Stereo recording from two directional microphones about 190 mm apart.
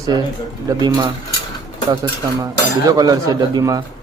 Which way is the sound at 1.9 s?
20° right (ahead or behind).